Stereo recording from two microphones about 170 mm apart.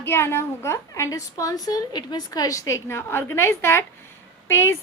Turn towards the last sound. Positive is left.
turn(degrees=15)  # may be behind; listen again after turning